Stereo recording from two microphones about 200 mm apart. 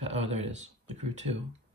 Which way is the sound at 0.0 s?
30° right (ahead or behind).